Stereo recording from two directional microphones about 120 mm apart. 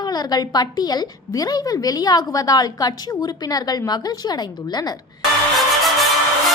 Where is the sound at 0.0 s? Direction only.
35° left (ahead or behind).